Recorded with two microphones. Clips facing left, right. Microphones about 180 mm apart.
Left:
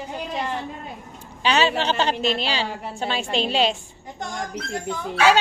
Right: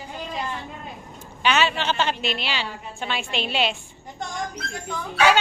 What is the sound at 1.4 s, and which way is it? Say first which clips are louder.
A woman's voice: left 2 dB; 35° left (ahead or behind).